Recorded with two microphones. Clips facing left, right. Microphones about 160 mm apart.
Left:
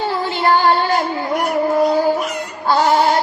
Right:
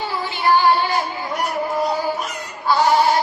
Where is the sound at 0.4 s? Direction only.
50° left (ahead or behind).